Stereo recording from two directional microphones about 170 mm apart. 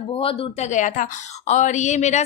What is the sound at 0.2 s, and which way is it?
A woman's voice, 35° left (ahead or behind).